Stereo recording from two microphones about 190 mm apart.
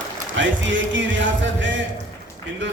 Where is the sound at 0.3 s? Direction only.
75° right (ahead or behind).